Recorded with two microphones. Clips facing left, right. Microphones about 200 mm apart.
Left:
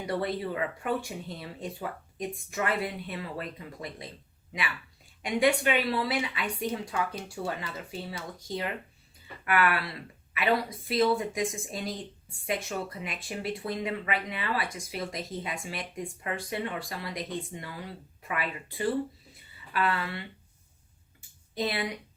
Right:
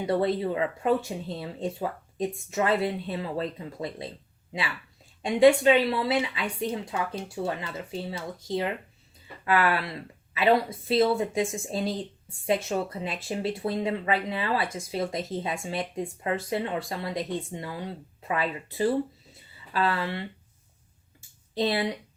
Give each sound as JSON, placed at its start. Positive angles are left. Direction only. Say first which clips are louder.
{"t": 0.0, "sound": "speech", "louder": "right 6 dB", "side_deg": -25}
{"t": 5.2, "sound": "speech", "louder": "right 7 dB", "side_deg": -25}
{"t": 19.3, "sound": "a sound", "louder": "right 2 dB", "side_deg": -30}